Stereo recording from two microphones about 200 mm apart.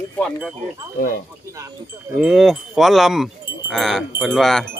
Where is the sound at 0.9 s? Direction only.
45° left (ahead or behind).